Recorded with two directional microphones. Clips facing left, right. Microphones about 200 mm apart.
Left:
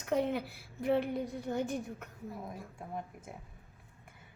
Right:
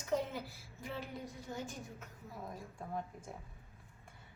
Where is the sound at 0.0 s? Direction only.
65° left (ahead or behind).